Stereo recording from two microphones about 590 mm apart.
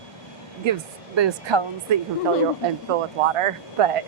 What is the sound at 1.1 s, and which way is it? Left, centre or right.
Speech, right.